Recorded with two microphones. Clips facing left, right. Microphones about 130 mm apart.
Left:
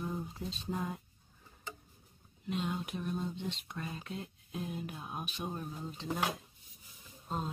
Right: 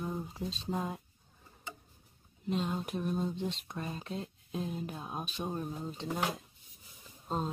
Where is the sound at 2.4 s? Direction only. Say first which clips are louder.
Right 3 dB; 40° right (ahead or behind).